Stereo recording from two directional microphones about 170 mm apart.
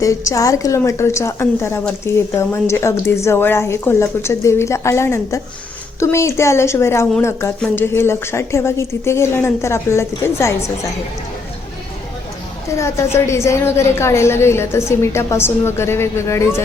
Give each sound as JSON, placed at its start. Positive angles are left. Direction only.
{"t": 0.0, "sound": "a woman's voice", "side_deg": 20}
{"t": 12.8, "sound": "a woman's voice", "side_deg": 15}